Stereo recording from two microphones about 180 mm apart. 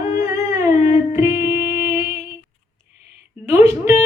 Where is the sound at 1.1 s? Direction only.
15° right (ahead or behind).